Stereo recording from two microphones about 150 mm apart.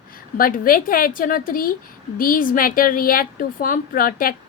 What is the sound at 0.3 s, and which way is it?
A woman's voice, 70° left (ahead or behind).